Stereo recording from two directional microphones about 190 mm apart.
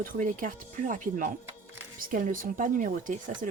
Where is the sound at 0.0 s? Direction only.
45° right (ahead or behind).